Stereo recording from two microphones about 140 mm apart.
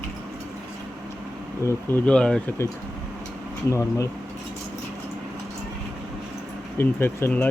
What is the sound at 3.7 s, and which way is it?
Speech, 20° left (ahead or behind).